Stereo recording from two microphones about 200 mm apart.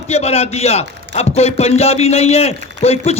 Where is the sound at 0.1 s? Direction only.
30° left (ahead or behind).